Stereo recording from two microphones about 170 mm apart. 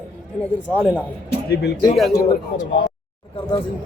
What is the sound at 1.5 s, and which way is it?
Speech, 75° left (ahead or behind).